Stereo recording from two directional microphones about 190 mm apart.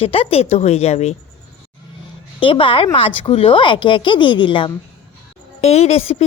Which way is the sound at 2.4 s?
25° left (ahead or behind).